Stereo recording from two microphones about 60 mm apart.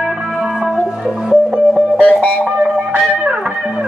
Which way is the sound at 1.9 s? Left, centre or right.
Left.